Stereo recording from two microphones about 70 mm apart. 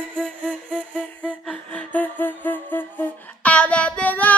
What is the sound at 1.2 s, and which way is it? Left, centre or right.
Music, centre.